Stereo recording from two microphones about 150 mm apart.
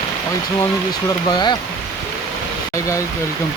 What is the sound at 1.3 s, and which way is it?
Speech, 30° left (ahead or behind).